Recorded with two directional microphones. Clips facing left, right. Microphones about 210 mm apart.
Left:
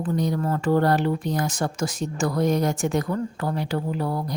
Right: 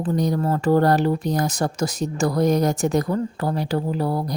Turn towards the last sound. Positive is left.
turn(degrees=-35)  # may be behind; listen again after turning